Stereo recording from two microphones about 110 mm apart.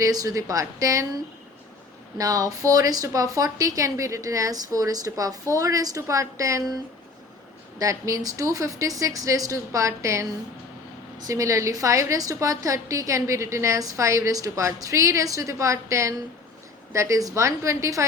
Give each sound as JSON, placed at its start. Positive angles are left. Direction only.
{"t": 0.0, "sound": "a woman's voice", "side_deg": -30}
{"t": 7.8, "sound": "a woman's voice", "side_deg": -30}